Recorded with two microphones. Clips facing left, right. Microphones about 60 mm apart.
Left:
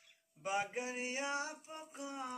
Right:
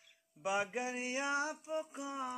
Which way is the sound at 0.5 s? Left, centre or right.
Right.